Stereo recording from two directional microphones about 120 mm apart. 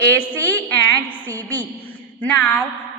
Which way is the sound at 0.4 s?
15° left (ahead or behind).